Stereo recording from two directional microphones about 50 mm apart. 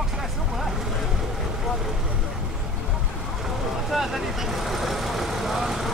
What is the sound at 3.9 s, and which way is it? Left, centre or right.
Vehicle, centre.